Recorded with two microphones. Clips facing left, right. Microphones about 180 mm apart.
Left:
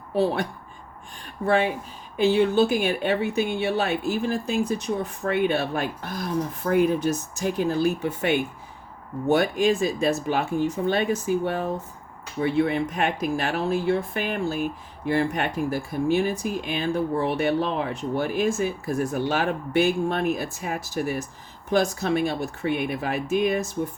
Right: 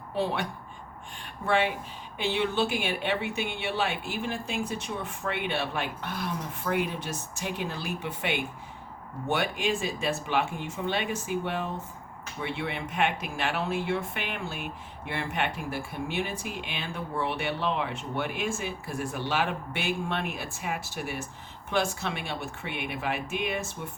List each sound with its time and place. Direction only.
1.5 s speech: 40° left (ahead or behind)